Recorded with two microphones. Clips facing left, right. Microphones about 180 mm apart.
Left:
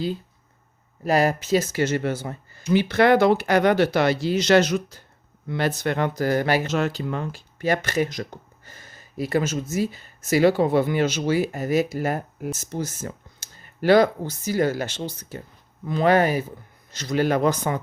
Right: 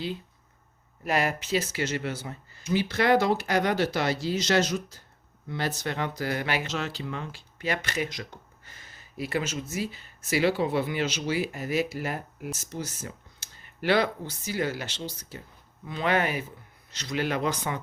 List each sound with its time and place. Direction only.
1.0 s speech: 35° left (ahead or behind)
15.9 s speech: 40° left (ahead or behind)